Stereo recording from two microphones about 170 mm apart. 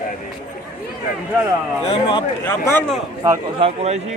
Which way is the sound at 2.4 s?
10° left (ahead or behind).